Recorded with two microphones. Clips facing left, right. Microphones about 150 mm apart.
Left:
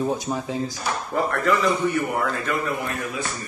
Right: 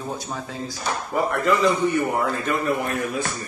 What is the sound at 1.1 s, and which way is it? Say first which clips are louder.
A man's voice: right 1 dB; 20° right (ahead or behind).